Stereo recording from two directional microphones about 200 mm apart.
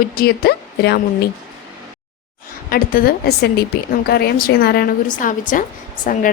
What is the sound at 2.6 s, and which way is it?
A woman's voice, 45° left (ahead or behind).